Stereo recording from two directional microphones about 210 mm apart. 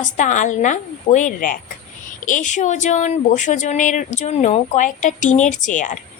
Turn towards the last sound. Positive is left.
turn(degrees=35)  # may be behind; listen again after turning